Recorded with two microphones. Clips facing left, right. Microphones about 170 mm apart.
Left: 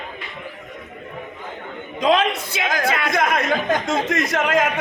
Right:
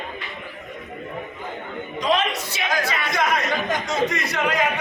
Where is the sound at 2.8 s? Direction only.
55° left (ahead or behind).